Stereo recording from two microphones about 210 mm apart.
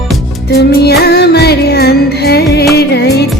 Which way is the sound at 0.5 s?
50° left (ahead or behind).